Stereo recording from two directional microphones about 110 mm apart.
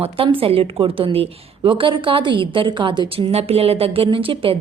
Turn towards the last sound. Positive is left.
turn(degrees=-55)  # may be behind; listen again after turning